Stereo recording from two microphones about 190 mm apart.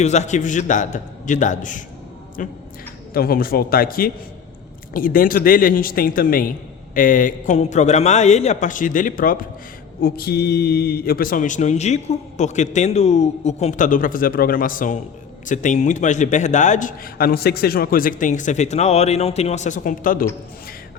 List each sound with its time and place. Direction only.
0.0 s a man's voice: 35° left (ahead or behind)